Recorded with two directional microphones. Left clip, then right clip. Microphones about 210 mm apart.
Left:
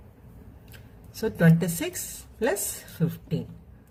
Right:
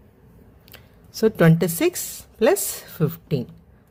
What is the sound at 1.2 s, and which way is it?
Speech, 50° right (ahead or behind).